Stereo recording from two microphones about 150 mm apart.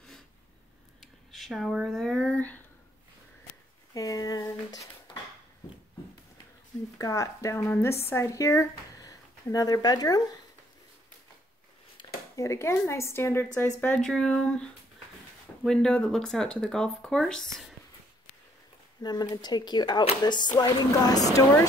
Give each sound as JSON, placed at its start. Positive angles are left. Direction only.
{"t": 1.0, "sound": "a sound", "side_deg": 0}
{"t": 3.9, "sound": "a sound", "side_deg": 25}
{"t": 7.0, "sound": "speech", "side_deg": 20}
{"t": 12.4, "sound": "a woman's voice", "side_deg": 20}
{"t": 14.0, "sound": "speech", "side_deg": 5}
{"t": 19.0, "sound": "a woman's voice", "side_deg": 25}